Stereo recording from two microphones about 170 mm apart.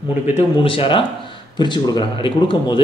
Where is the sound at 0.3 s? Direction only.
30° left (ahead or behind).